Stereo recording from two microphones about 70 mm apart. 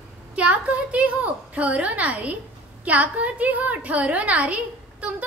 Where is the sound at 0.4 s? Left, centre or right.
Centre.